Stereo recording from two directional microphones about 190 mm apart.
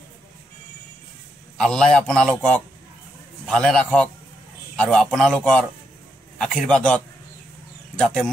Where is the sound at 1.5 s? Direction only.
5° left (ahead or behind).